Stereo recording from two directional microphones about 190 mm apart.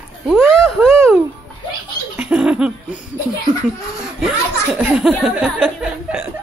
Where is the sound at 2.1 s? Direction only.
5° right (ahead or behind).